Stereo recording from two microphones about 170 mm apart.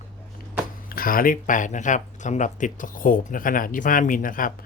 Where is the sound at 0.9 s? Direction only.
55° left (ahead or behind).